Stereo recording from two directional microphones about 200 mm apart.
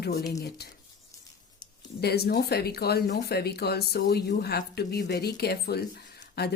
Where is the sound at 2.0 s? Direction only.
50° left (ahead or behind).